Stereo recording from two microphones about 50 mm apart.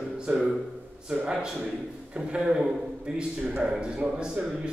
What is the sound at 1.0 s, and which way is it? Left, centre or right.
A man's voice, centre.